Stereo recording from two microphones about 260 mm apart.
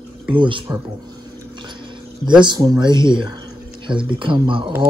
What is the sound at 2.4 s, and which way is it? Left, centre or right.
Speech, centre.